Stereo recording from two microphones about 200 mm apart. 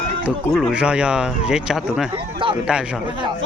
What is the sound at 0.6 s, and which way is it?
Speech, 5° right (ahead or behind).